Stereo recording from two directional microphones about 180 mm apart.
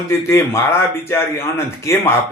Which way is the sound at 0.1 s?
15° left (ahead or behind).